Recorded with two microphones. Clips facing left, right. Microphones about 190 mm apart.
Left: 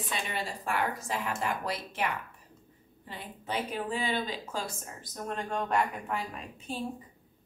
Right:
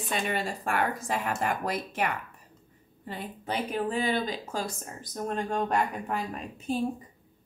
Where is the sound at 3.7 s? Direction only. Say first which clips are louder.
Right 6 dB; 45° right (ahead or behind).